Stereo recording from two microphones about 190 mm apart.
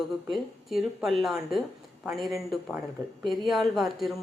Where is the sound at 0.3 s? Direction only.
Centre (ahead or behind).